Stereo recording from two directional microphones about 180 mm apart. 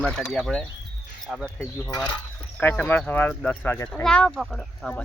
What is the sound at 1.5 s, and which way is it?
Speech, 15° left (ahead or behind).